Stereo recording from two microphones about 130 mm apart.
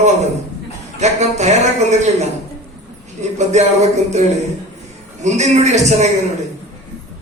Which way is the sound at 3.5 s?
60° right (ahead or behind).